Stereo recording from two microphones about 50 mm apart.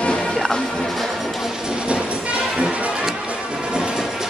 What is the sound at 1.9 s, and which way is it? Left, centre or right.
Train, right.